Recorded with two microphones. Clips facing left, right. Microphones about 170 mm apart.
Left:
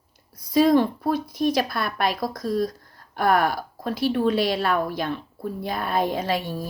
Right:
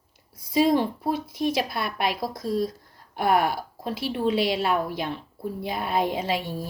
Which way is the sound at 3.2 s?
50° left (ahead or behind).